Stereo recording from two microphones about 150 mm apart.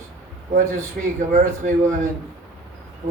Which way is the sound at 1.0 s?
70° right (ahead or behind).